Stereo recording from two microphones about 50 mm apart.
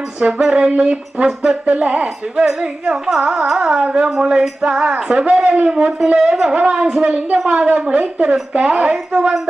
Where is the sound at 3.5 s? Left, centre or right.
Centre.